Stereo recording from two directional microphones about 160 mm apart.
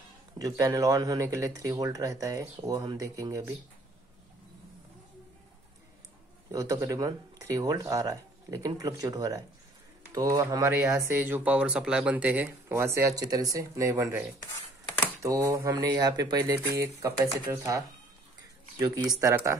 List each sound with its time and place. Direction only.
0.4 s speech: 20° right (ahead or behind)
6.5 s speech: 20° right (ahead or behind)
15.2 s speech: 20° right (ahead or behind)